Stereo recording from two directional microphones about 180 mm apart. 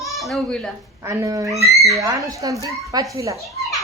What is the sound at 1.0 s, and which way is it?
Speech, 15° right (ahead or behind).